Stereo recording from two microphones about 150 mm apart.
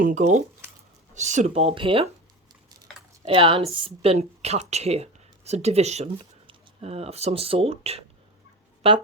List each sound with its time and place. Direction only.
0.0 s a woman's voice: 55° right (ahead or behind); by 2.0 s 35° right (ahead or behind)
3.2 s a woman's voice: 35° right (ahead or behind)